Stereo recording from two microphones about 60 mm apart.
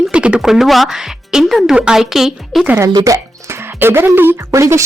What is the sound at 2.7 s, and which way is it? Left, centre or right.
Speech, right.